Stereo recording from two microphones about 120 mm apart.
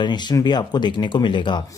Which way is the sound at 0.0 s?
35° left (ahead or behind).